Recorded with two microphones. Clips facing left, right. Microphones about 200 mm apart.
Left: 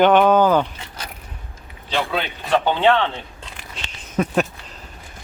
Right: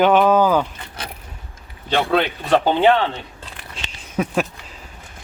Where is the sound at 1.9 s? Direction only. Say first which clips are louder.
Right 5 dB; 55° right (ahead or behind).